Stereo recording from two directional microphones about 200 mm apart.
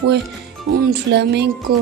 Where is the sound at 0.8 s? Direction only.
55° right (ahead or behind).